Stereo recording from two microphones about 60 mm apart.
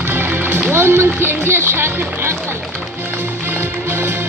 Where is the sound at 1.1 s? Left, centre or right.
Right.